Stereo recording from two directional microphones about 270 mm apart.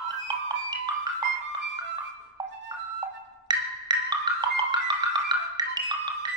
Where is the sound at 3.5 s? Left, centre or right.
Centre.